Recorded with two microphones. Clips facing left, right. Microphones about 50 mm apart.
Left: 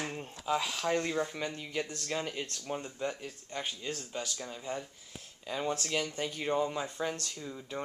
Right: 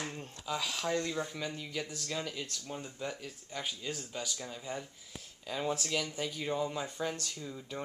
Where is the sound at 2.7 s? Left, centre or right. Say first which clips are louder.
Left 3 dB; centre.